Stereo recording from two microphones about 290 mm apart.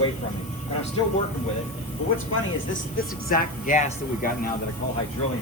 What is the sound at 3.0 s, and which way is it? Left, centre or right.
Speech, left.